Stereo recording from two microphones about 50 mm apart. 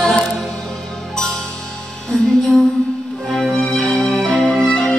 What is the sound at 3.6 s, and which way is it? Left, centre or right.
Music, centre.